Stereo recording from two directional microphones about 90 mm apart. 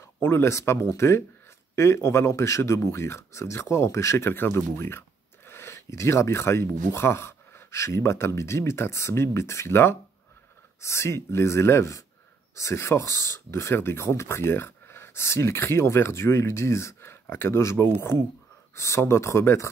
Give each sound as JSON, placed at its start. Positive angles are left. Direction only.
{"t": 0.2, "sound": "speech", "side_deg": 30}